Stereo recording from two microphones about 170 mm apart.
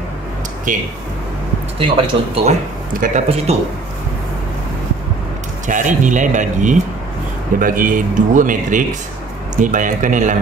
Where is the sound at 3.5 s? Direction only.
40° right (ahead or behind).